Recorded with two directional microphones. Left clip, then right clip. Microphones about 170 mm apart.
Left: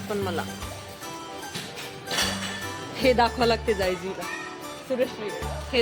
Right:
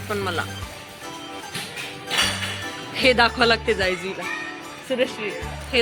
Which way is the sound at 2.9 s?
Centre (ahead or behind).